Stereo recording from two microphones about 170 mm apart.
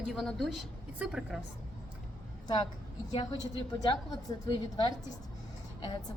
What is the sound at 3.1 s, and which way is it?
A woman's voice, 25° left (ahead or behind).